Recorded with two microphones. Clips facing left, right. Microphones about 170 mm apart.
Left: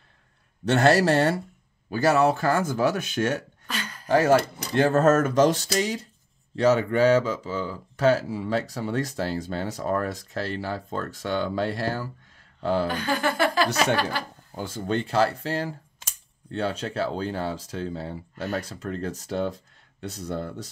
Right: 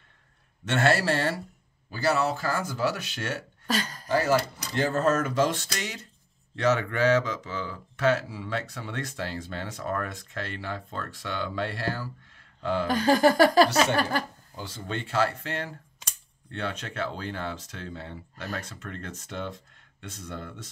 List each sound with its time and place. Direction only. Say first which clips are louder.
0.7 s speech: left 5 dB; 40° left (ahead or behind)
1.9 s speech: left 5 dB; 55° left (ahead or behind)
3.6 s speech: right 5 dB; 40° right (ahead or behind)
4.1 s speech: left 5 dB; 55° left (ahead or behind)
12.8 s speech: right 5 dB; 35° right (ahead or behind)
14.5 s speech: left 8 dB; 45° left (ahead or behind)